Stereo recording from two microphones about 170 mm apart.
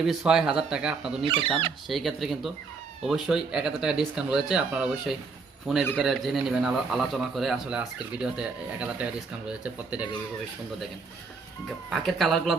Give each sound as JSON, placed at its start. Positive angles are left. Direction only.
{"t": 0.0, "sound": "a man's voice", "side_deg": 0}
{"t": 1.2, "sound": "speech", "side_deg": -30}
{"t": 1.9, "sound": "a man's voice", "side_deg": 0}
{"t": 11.9, "sound": "a man's voice", "side_deg": 0}